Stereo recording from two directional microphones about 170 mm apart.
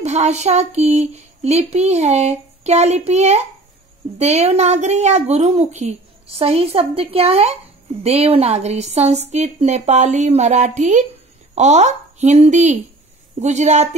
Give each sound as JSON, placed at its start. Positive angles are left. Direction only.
{"t": 0.0, "sound": "a woman's voice", "side_deg": -40}